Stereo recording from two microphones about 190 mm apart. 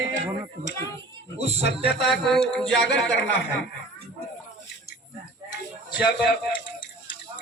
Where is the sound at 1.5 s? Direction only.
30° right (ahead or behind).